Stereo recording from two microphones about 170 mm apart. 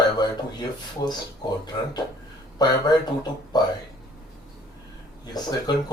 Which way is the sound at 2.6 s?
25° left (ahead or behind).